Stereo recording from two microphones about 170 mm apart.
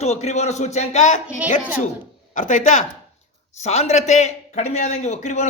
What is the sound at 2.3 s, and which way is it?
A woman's voice, 50° left (ahead or behind).